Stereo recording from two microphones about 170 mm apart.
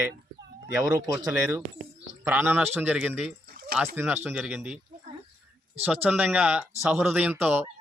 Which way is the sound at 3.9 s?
10° right (ahead or behind).